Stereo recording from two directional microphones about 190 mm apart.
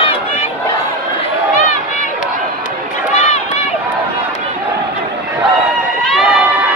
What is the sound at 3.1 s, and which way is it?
Run, 40° left (ahead or behind).